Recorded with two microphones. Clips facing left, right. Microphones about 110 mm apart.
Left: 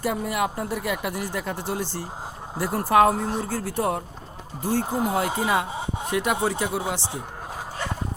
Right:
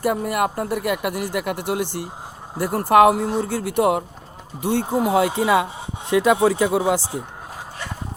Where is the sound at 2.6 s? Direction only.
50° right (ahead or behind); by 4.8 s 70° right (ahead or behind).